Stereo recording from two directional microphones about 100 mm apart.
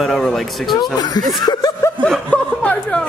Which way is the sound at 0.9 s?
40° left (ahead or behind).